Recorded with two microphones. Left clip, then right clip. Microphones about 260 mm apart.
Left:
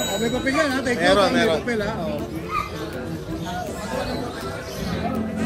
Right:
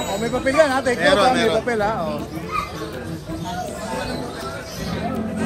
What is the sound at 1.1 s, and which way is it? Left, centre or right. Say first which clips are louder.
Speech: right 1 dB; left.